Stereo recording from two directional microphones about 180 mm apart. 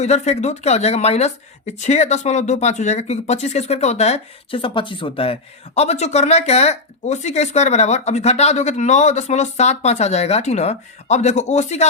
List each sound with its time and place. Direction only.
0.0 s speech: 40° left (ahead or behind)